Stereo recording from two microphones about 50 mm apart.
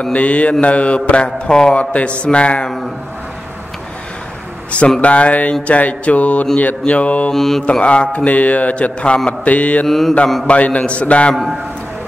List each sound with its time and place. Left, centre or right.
0.0 s mantra: left
5.0 s mantra: left
7.3 s mantra: centre
7.8 s mantra: left
9.8 s a man's voice: centre
10.4 s mantra: left
11.3 s a man's voice: centre